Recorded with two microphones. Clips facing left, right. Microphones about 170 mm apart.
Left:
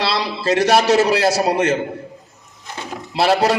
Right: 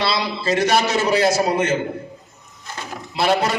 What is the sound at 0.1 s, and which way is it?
A man's voice, 35° left (ahead or behind).